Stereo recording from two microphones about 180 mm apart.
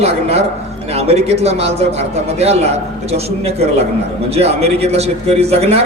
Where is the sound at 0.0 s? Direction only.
35° right (ahead or behind).